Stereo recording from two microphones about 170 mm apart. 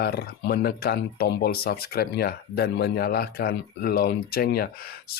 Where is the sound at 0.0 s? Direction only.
70° left (ahead or behind).